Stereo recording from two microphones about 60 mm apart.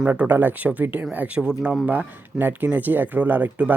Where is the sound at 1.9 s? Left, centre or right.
Right.